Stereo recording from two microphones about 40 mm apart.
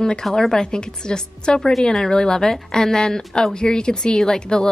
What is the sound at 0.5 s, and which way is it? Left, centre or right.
A woman's voice, centre.